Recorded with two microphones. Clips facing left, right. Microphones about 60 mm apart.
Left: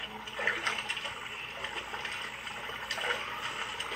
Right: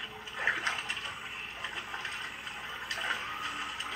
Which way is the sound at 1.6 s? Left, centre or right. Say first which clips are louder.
Left 1 dB; right.